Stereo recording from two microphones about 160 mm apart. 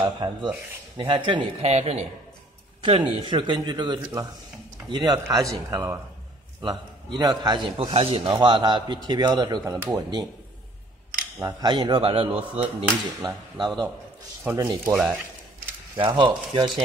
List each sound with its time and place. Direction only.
0.0 s speech: 30° right (ahead or behind)
1.7 s a man's voice: 40° right (ahead or behind)
2.8 s speech: 30° right (ahead or behind)
11.6 s speech: 30° right (ahead or behind)
12.3 s speech: 10° right (ahead or behind)
13.2 s speech: 25° right (ahead or behind)
14.4 s speech: 15° right (ahead or behind)
16.0 s speech: 30° right (ahead or behind)